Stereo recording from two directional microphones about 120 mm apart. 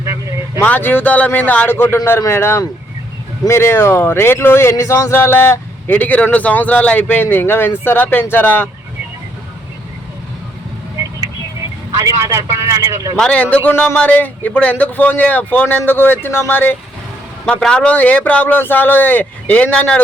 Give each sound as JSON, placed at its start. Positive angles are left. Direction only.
{"t": 0.0, "sound": "vehicle", "side_deg": -25}
{"t": 0.6, "sound": "a man's voice", "side_deg": 15}
{"t": 10.9, "sound": "vehicle", "side_deg": -30}
{"t": 11.9, "sound": "a man's voice", "side_deg": -25}
{"t": 13.1, "sound": "a man's voice", "side_deg": 10}
{"t": 17.4, "sound": "a man's voice", "side_deg": 5}